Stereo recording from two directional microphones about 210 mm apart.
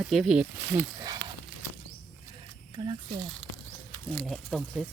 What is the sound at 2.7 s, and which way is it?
Speech, 25° right (ahead or behind).